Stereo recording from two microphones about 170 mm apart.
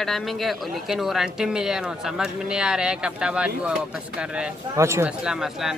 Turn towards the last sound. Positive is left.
turn(degrees=0)  # may be behind; listen again after turning